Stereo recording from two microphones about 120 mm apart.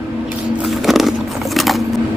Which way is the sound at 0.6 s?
Centre (ahead or behind).